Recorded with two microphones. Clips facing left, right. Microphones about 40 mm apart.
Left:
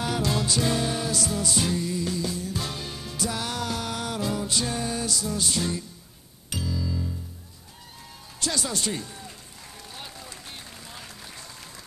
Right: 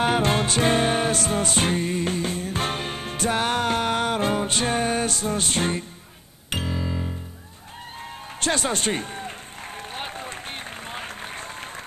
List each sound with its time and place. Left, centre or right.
0.0 s music: right
8.4 s speech: right
9.8 s applause: right